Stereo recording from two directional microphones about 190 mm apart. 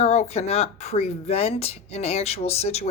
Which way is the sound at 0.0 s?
35° left (ahead or behind).